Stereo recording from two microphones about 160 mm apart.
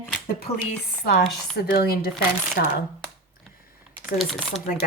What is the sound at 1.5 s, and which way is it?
Speech, 85° left.